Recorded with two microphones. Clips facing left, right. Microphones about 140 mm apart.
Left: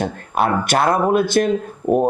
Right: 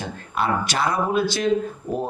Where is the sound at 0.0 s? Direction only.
55° left (ahead or behind).